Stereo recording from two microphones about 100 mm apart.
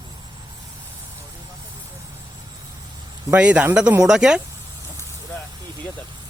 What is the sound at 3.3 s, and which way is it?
Speech, 15° right (ahead or behind).